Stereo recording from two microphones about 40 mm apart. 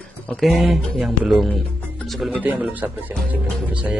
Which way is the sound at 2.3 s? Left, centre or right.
Right.